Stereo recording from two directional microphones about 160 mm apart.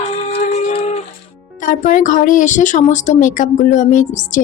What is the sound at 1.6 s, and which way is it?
Speech, 55° left (ahead or behind).